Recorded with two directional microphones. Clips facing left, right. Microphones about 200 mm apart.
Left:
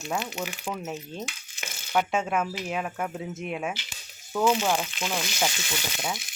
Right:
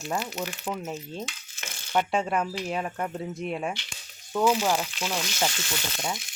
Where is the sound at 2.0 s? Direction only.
5° left (ahead or behind).